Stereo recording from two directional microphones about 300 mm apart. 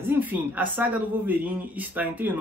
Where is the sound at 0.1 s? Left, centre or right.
Centre.